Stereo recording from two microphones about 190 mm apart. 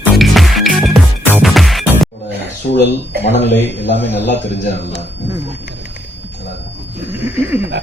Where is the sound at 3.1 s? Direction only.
55° right (ahead or behind).